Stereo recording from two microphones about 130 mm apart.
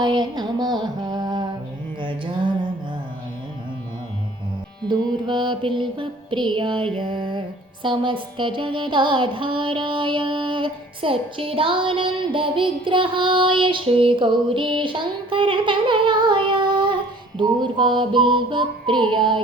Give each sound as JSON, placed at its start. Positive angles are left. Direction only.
{"t": 0.0, "sound": "music", "side_deg": -35}
{"t": 2.0, "sound": "mantra", "side_deg": -40}
{"t": 4.9, "sound": "music", "side_deg": -35}